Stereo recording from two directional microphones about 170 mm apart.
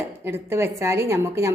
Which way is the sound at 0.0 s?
15° right (ahead or behind).